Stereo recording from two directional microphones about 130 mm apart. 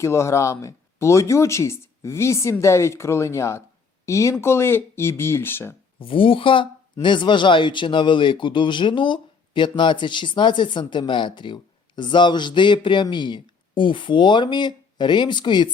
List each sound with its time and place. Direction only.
0.0 s speech: 20° left (ahead or behind)
6.0 s speech: 45° left (ahead or behind)